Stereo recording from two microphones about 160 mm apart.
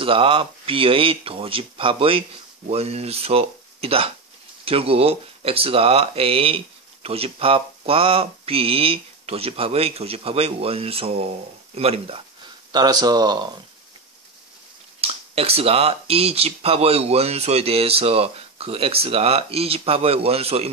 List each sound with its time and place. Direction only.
0.0 s speech: 35° right (ahead or behind)
12.7 s speech: 25° right (ahead or behind)
15.0 s speech: 40° right (ahead or behind)